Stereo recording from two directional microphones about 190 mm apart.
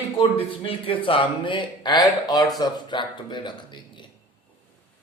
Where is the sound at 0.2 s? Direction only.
30° left (ahead or behind).